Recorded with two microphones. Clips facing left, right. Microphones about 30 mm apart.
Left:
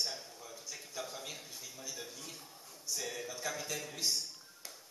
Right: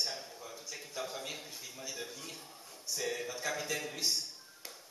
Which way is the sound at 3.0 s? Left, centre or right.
Centre.